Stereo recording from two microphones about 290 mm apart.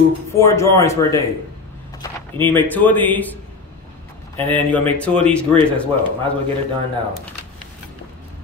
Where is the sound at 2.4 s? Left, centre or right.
Centre.